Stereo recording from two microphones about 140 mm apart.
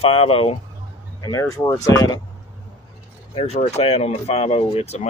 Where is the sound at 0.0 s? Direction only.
40° left (ahead or behind).